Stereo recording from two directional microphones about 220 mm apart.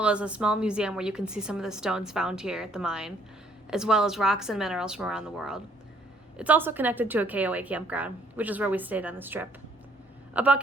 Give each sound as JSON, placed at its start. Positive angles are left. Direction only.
{"t": 0.0, "sound": "a woman's voice", "side_deg": -5}